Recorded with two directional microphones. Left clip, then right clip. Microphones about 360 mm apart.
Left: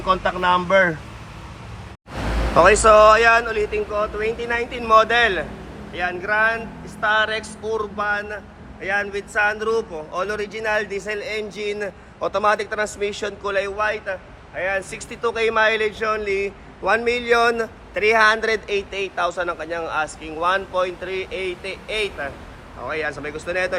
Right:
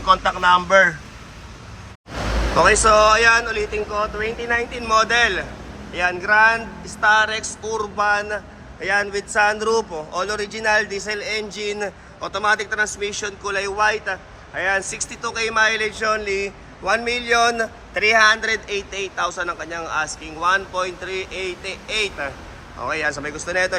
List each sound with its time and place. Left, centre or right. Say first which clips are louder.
0.0 s speech: right 3 dB; centre
2.6 s speech: left 2 dB; centre